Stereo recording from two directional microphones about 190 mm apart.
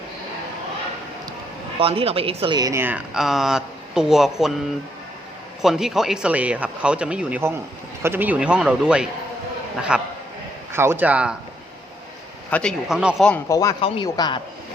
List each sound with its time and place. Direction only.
1.8 s speech: 30° right (ahead or behind); by 4.5 s centre (ahead or behind)
5.6 s speech: centre (ahead or behind)
12.5 s a man's voice: 5° left (ahead or behind)
12.9 s speech: 5° right (ahead or behind)
13.5 s speech: 20° left (ahead or behind)